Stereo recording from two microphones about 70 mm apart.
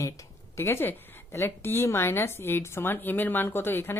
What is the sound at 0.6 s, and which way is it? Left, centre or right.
Speech, left.